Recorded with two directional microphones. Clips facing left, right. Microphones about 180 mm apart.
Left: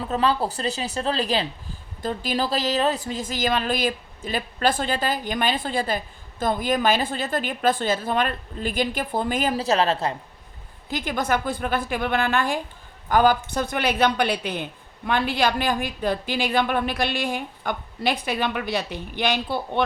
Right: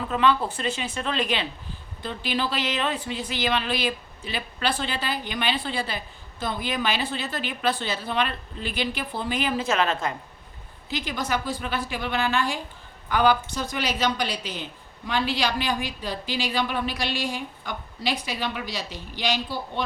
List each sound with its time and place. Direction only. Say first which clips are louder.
0.1 s a woman's voice: even; 35° left (ahead or behind)
10.8 s a woman's voice: left 4 dB; 50° left (ahead or behind)